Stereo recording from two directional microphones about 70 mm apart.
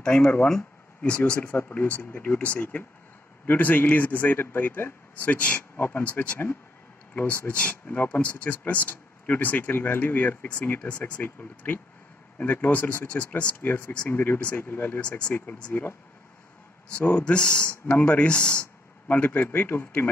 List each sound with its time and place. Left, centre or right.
0.0 s a man's voice: centre; by 6.2 s left
7.4 s a man's voice: centre
15.0 s a man's voice: centre
16.9 s a man's voice: centre